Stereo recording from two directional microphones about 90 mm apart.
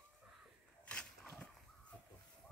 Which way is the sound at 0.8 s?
15° left (ahead or behind).